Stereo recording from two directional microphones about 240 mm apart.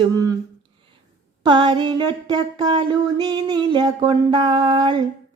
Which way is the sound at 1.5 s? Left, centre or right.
Centre.